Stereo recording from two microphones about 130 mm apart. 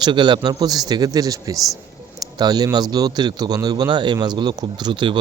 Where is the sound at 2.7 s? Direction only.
30° right (ahead or behind).